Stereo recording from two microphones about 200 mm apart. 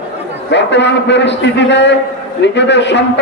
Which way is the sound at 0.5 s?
60° left (ahead or behind).